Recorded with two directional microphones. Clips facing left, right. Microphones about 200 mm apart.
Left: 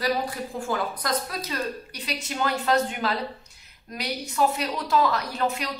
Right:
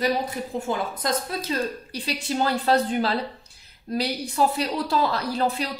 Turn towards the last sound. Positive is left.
turn(degrees=-30)  # may be behind; listen again after turning